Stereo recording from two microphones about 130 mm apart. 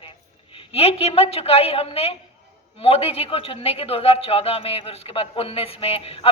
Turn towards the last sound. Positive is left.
turn(degrees=50)  # may be behind; listen again after turning